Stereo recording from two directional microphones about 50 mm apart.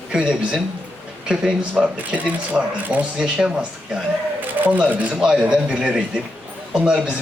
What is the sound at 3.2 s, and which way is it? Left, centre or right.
Speech, centre.